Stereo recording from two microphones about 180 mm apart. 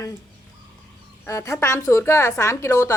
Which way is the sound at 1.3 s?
15° left (ahead or behind).